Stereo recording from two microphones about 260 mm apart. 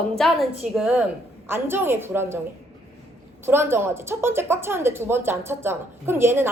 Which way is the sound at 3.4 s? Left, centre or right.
Centre.